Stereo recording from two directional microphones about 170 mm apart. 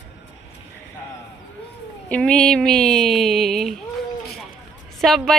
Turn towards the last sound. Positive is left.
turn(degrees=0)  # may be behind; listen again after turning